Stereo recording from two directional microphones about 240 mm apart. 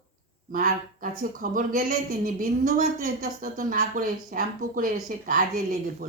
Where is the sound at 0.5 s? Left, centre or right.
Right.